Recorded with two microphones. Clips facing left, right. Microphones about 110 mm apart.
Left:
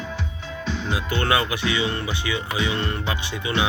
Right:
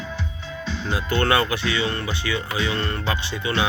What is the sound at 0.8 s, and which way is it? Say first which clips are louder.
Speech: right 4 dB; 15° left (ahead or behind).